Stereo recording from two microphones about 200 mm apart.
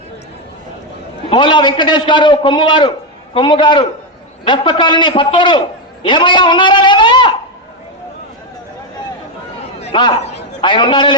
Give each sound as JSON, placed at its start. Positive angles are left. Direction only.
{"t": 1.3, "sound": "a man's voice", "side_deg": 25}
{"t": 9.9, "sound": "a man's voice", "side_deg": 25}